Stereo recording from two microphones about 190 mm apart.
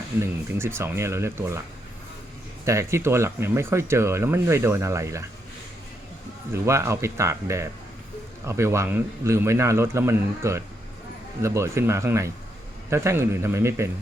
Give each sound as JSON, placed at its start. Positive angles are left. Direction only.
{"t": 0.2, "sound": "speech", "side_deg": -15}
{"t": 2.6, "sound": "speech", "side_deg": -15}
{"t": 6.5, "sound": "speech", "side_deg": -15}